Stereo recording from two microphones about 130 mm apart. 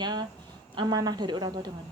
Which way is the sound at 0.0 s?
35° right (ahead or behind).